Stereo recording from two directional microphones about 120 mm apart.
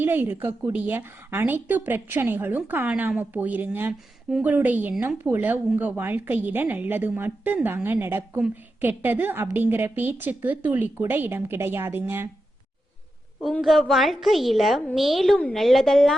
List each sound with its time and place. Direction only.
0.0 s speech: 15° right (ahead or behind)
13.4 s a woman's voice: centre (ahead or behind)